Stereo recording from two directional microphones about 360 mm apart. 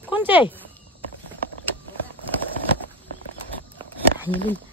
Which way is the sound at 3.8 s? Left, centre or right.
Centre.